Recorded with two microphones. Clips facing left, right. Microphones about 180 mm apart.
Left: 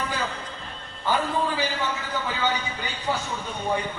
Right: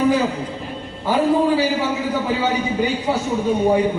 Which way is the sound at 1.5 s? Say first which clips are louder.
Right 9 dB; 10° right (ahead or behind).